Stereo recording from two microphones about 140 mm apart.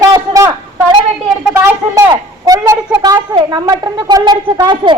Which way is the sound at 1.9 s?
25° right (ahead or behind).